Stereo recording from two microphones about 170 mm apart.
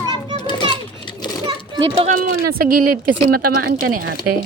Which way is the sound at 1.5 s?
30° right (ahead or behind).